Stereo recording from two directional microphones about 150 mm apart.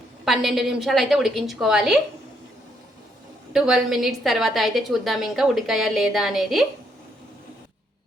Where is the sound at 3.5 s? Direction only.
5° right (ahead or behind).